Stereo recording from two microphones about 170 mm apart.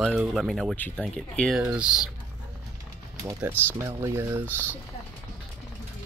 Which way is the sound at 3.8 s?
15° right (ahead or behind).